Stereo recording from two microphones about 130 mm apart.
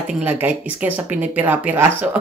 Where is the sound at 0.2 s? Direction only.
15° right (ahead or behind).